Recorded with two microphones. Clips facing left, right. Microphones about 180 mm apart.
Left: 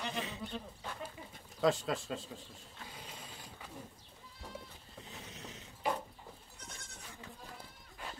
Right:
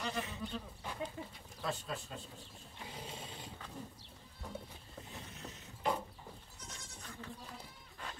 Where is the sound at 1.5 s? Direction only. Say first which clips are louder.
Left 9 dB; 90° left.